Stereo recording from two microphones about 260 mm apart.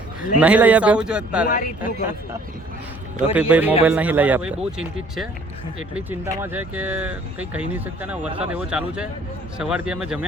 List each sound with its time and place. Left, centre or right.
0.3 s speech: centre
1.5 s speech: left
1.8 s speech: centre